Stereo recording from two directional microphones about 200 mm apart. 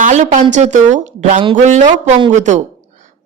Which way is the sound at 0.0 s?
35° right (ahead or behind).